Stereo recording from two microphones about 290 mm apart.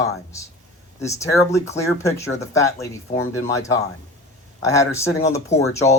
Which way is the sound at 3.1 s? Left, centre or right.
Left.